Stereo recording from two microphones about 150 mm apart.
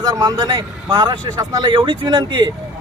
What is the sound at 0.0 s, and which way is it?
Speech, 25° right (ahead or behind).